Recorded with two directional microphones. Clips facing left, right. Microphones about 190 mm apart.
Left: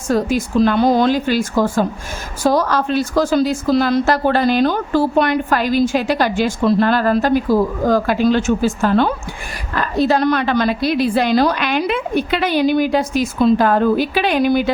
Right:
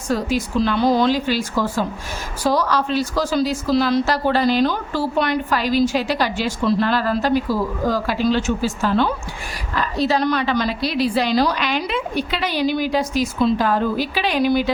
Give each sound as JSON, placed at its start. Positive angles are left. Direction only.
{"t": 0.1, "sound": "a woman's voice", "side_deg": 50}